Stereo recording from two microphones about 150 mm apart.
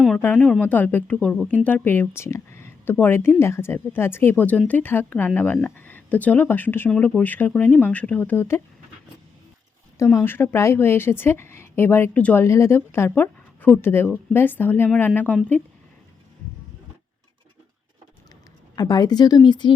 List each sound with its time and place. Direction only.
0.2 s speech: 10° left (ahead or behind)
10.0 s speech: 15° left (ahead or behind)
18.8 s speech: 25° left (ahead or behind)